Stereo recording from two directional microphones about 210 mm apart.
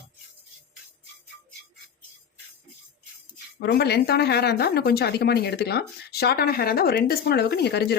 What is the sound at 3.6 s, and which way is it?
A woman's voice, 50° left (ahead or behind).